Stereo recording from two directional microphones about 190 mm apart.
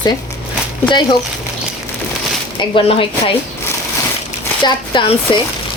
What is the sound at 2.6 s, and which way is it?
Speech, 25° left (ahead or behind).